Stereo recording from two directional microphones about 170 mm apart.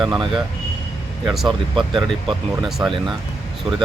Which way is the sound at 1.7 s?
30° right (ahead or behind).